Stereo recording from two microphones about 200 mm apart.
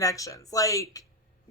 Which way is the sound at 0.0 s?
15° left (ahead or behind).